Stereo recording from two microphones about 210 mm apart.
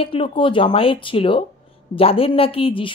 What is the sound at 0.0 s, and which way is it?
Speech, 25° left (ahead or behind).